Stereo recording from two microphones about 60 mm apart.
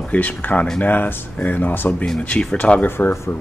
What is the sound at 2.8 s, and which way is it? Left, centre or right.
Speech, left.